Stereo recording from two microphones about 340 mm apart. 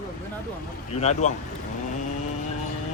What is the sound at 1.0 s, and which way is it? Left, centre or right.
Speech, centre.